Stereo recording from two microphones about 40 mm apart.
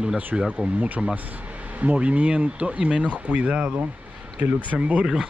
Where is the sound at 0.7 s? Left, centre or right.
Right; by 5.3 s centre.